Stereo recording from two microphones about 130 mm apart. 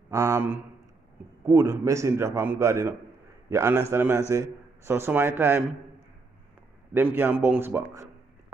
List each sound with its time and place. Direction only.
0.1 s a man's voice: 25° right (ahead or behind)
6.9 s a man's voice: 15° right (ahead or behind)